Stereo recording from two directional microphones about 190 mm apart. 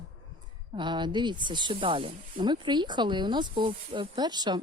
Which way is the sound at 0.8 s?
25° right (ahead or behind).